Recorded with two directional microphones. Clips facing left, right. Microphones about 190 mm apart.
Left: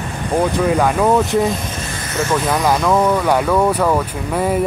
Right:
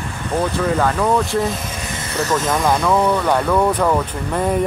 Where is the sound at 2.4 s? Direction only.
5° left (ahead or behind).